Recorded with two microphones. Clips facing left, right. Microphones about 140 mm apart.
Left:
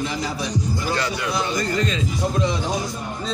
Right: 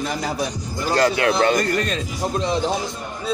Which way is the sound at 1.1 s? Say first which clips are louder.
Right 6 dB; 65° right (ahead or behind).